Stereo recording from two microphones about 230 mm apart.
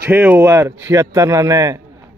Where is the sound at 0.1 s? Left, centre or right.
Centre.